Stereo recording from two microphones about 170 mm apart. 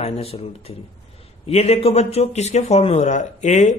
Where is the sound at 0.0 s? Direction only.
35° left (ahead or behind).